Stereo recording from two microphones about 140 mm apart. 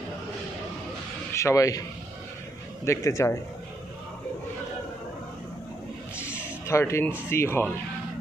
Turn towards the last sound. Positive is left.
turn(degrees=15)  # may be behind; listen again after turning